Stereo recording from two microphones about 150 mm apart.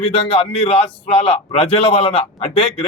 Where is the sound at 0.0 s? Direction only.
45° left (ahead or behind).